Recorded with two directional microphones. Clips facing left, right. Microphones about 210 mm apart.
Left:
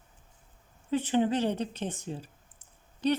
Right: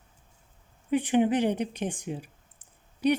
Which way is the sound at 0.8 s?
15° right (ahead or behind).